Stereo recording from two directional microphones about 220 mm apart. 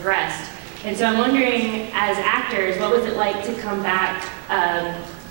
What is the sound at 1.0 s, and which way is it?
A woman's voice, 15° right (ahead or behind).